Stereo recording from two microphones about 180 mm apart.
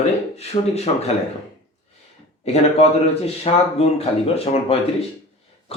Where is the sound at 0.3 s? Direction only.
35° left (ahead or behind).